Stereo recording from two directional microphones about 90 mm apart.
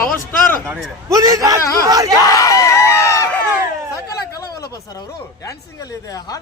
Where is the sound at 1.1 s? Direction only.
40° right (ahead or behind).